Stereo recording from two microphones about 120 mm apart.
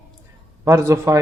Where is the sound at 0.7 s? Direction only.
25° right (ahead or behind).